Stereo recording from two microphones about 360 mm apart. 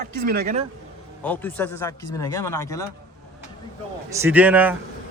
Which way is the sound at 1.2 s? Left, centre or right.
Centre.